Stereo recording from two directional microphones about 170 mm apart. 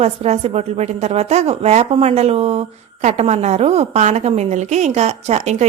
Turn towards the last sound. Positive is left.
turn(degrees=-40)  # may be behind; listen again after turning